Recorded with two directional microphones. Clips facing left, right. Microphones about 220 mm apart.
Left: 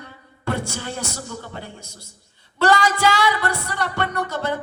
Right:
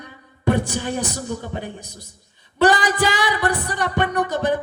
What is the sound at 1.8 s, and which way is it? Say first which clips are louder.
Speech: right 3 dB; 10° left (ahead or behind).